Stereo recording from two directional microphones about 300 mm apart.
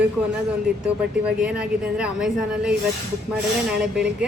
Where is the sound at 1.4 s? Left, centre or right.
Centre.